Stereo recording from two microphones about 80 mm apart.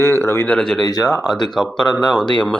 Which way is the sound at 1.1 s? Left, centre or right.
Centre.